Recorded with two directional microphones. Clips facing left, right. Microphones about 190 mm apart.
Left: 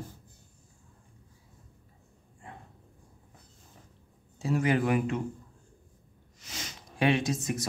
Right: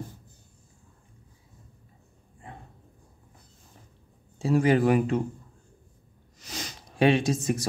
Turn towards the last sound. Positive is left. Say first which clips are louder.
# right 4 dB
turn(degrees=-30)  # may be behind; listen again after turning